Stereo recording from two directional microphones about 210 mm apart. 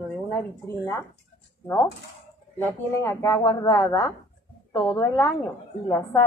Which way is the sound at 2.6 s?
10° left (ahead or behind).